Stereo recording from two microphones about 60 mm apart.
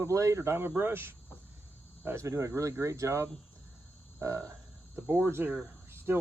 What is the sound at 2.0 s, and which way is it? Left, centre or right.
Speech, right.